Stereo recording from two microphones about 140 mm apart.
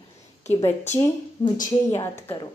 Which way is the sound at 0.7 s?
50° left (ahead or behind).